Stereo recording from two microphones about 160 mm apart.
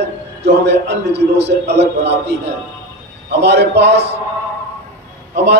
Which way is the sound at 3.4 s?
90° right.